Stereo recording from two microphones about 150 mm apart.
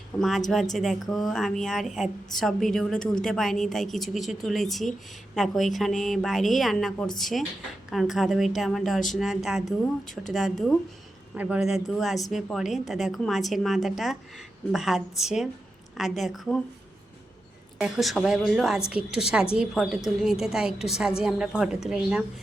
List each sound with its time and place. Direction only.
0.2 s speech: centre (ahead or behind)
17.7 s speech: 5° right (ahead or behind)